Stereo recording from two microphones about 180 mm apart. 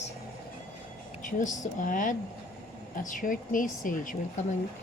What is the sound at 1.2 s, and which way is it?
A woman's voice, 45° left (ahead or behind).